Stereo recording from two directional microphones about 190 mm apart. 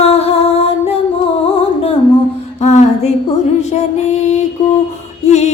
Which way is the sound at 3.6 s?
35° left (ahead or behind).